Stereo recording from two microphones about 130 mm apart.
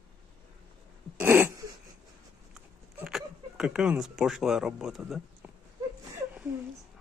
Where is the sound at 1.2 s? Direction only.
15° right (ahead or behind).